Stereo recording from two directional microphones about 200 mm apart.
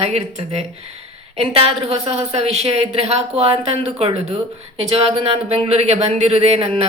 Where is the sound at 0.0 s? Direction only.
35° right (ahead or behind).